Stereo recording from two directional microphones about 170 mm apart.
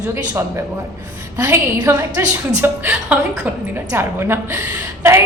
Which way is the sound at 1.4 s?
15° right (ahead or behind).